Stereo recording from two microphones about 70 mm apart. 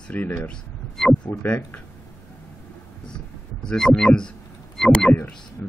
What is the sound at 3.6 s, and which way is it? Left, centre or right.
Speech, centre.